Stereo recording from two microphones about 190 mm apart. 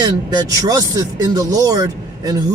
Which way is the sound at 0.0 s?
20° right (ahead or behind).